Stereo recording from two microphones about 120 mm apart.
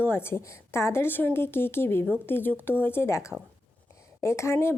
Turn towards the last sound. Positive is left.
turn(degrees=20)  # may be behind; listen again after turning